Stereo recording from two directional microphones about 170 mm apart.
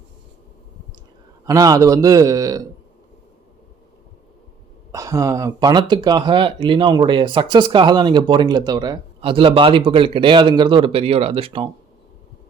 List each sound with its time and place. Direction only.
1.5 s speech: 20° right (ahead or behind)
4.9 s speech: 20° right (ahead or behind)